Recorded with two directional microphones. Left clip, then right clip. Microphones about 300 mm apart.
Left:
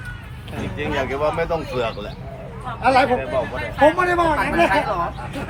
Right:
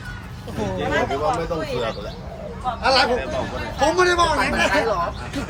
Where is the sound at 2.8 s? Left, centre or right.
Left.